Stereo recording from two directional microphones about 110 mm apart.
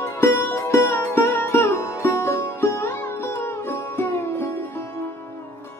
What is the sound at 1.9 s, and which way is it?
Music, 25° left (ahead or behind).